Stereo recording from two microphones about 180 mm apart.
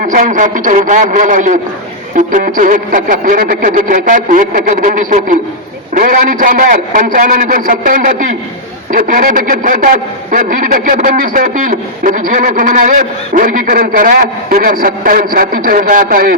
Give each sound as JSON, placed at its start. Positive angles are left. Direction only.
{"t": 0.0, "sound": "speech", "side_deg": -45}